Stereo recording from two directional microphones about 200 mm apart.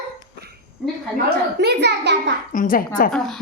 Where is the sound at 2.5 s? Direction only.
45° left (ahead or behind).